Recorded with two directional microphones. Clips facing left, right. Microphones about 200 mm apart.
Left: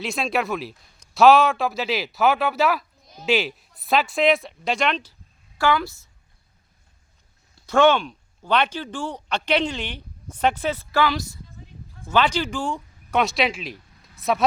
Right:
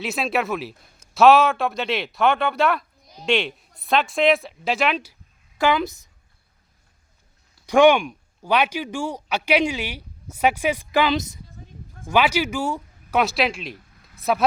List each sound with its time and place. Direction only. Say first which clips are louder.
0.0 s speech: right 1 dB; centre (ahead or behind)
5.5 s a woman's voice: right 1 dB; 20° right (ahead or behind)
7.7 s speech: right 3 dB; 15° right (ahead or behind)